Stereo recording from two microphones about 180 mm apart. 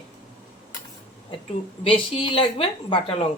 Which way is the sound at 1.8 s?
25° left (ahead or behind).